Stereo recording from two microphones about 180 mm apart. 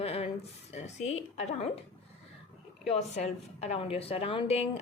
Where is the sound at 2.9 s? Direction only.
35° left (ahead or behind).